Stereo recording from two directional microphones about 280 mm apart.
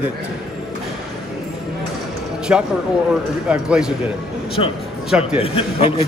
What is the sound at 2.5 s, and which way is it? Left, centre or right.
A man's voice, centre.